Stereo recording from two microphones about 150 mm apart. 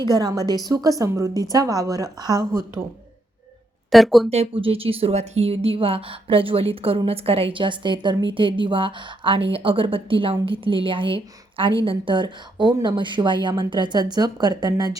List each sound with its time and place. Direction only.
0.0 s a woman's voice: 25° right (ahead or behind)
3.9 s speech: centre (ahead or behind)
4.3 s a woman's voice: 40° right (ahead or behind); by 14.9 s 25° right (ahead or behind)